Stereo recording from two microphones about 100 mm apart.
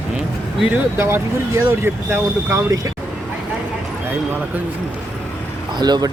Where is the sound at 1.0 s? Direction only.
25° right (ahead or behind).